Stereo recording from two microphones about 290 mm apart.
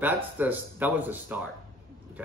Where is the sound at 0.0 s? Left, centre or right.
Centre.